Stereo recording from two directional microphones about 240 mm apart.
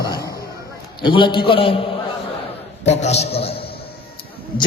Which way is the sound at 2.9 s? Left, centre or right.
Left.